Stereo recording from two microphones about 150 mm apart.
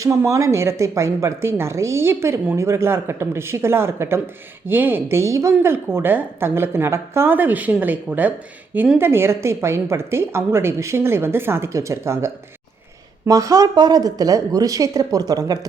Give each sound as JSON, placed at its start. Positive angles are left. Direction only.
{"t": 0.0, "sound": "speech", "side_deg": -20}